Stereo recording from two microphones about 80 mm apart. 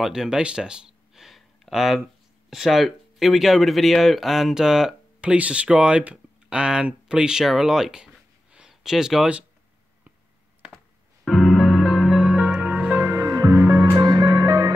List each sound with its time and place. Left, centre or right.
0.0 s a sound: centre
2.5 s speech: centre
11.2 s music: centre
13.1 s music: right
13.9 s music: right